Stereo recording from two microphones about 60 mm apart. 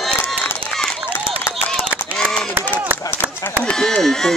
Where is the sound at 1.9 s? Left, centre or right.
Right.